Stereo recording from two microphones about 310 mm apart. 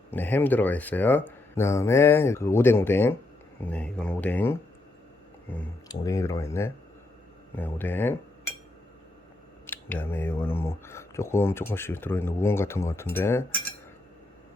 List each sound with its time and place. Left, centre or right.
0.1 s speech: centre
9.6 s speech: centre